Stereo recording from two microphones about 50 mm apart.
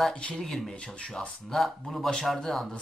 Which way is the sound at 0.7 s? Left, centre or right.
Left.